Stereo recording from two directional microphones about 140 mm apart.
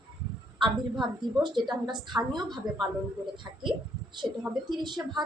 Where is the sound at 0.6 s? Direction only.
35° right (ahead or behind).